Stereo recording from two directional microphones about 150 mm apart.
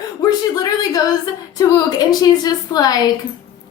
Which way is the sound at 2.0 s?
25° left (ahead or behind).